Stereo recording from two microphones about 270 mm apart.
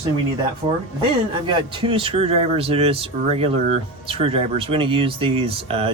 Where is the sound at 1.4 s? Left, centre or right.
Centre.